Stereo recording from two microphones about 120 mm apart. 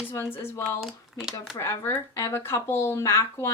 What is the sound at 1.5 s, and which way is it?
Speech, 20° left (ahead or behind).